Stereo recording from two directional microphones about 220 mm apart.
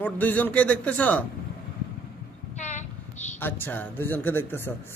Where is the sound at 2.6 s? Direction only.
30° left (ahead or behind).